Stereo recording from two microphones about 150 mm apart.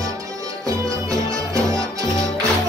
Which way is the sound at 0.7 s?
20° right (ahead or behind).